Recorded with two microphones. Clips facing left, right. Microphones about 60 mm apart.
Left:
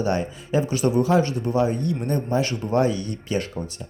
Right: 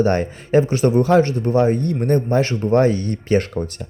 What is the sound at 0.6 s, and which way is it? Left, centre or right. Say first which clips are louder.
Speech: right 4 dB; right.